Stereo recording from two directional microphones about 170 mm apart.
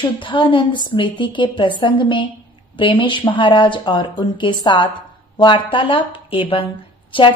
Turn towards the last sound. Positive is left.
turn(degrees=30)  # may be behind; listen again after turning